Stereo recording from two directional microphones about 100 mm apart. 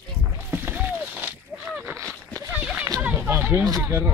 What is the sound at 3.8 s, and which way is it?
Speech, 20° right (ahead or behind).